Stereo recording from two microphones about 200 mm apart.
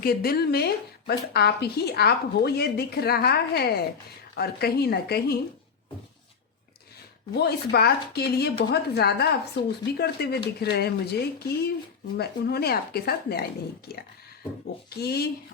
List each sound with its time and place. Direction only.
0.0 s speech: 50° left (ahead or behind)
7.3 s speech: 55° left (ahead or behind)
14.8 s speech: 50° left (ahead or behind)